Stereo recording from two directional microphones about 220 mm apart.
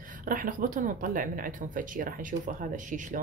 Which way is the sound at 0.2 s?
40° right (ahead or behind).